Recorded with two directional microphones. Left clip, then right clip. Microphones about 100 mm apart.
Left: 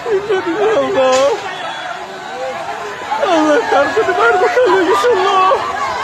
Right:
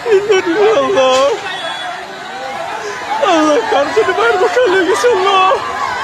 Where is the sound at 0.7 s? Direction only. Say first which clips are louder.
Left 1 dB; centre (ahead or behind).